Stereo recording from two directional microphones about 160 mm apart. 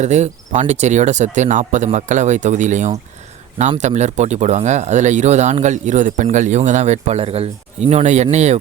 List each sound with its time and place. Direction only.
0.0 s speech: 45° right (ahead or behind)